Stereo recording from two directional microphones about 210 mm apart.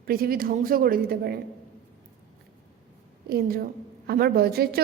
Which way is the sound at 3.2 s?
45° right (ahead or behind).